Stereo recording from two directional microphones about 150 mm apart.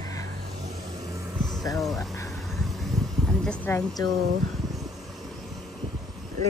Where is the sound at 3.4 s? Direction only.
10° left (ahead or behind).